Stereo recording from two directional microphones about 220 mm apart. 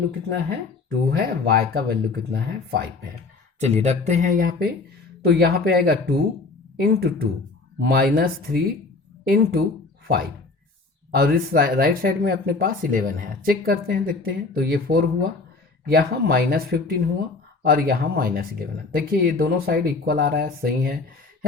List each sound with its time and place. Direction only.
1.1 s speech: 45° right (ahead or behind)
3.6 s speech: 30° right (ahead or behind)
11.1 s speech: 45° right (ahead or behind)